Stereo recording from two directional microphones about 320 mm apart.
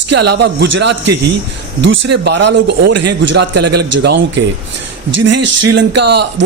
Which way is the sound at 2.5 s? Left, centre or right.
Right.